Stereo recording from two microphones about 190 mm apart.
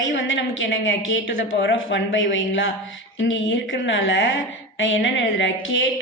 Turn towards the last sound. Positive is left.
turn(degrees=85)